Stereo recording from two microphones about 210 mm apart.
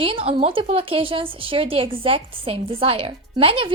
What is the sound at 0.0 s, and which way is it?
Speech, 25° right (ahead or behind).